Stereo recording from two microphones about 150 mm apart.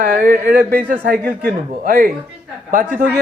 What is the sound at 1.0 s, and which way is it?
Speech, 90° right.